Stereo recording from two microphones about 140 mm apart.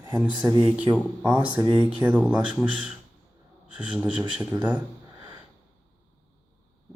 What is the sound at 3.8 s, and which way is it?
Speech, 5° right (ahead or behind).